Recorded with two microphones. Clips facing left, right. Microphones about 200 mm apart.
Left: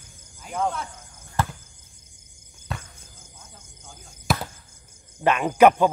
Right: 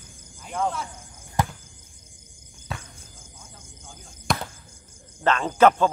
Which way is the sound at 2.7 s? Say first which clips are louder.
Left 1 dB; centre (ahead or behind).